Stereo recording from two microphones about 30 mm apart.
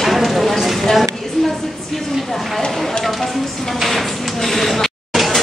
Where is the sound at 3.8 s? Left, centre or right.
Centre.